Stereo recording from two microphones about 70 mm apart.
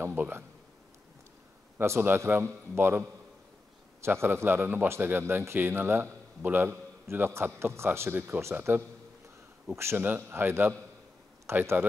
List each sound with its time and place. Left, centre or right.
0.0 s a man's voice: right
1.8 s a man's voice: right